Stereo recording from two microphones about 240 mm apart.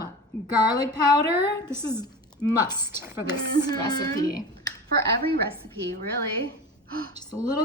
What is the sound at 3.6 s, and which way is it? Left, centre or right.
Speech, centre.